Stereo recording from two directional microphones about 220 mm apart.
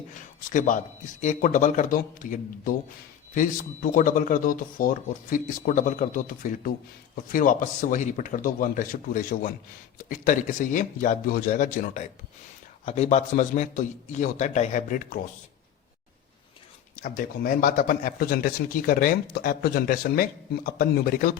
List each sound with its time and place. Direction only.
0.5 s speech: 35° left (ahead or behind)
17.0 s speech: 40° left (ahead or behind)